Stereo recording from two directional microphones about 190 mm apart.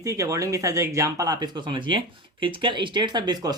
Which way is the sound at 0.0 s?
15° right (ahead or behind).